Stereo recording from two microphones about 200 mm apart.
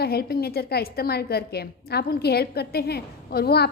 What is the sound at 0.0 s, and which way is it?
A woman's voice, 50° left (ahead or behind).